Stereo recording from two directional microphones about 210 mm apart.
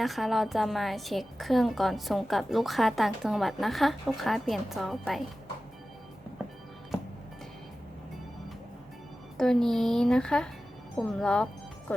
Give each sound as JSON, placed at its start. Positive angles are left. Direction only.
{"t": 0.0, "sound": "a woman's voice", "side_deg": 0}
{"t": 9.4, "sound": "a woman's voice", "side_deg": 0}